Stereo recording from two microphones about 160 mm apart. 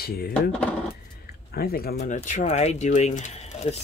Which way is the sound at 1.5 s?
70° left (ahead or behind).